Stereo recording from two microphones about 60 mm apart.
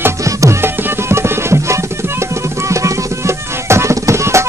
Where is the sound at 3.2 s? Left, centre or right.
Right.